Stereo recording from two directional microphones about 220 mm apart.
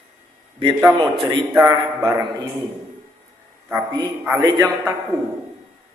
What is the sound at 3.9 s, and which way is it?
A man's voice, 15° right (ahead or behind).